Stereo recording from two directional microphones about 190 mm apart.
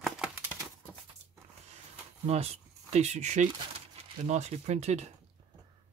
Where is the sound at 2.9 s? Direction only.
35° right (ahead or behind).